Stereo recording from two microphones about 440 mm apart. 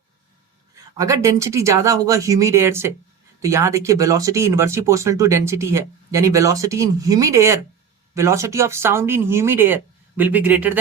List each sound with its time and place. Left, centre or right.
0.9 s speech: centre